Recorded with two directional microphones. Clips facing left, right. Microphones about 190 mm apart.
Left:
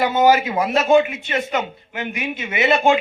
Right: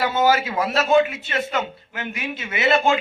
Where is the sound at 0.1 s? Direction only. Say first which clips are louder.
Left 4 dB; 15° left (ahead or behind).